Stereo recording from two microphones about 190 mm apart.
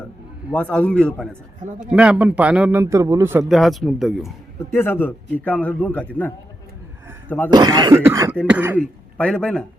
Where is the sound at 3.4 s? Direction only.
Centre (ahead or behind).